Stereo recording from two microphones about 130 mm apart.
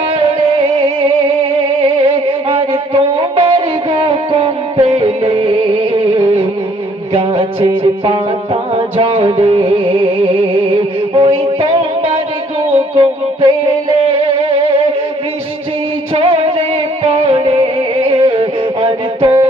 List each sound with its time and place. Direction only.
1.8 s music: 45° right (ahead or behind)
11.1 s a sound: 45° right (ahead or behind)
12.7 s music: 40° right (ahead or behind)
16.1 s music: 45° right (ahead or behind)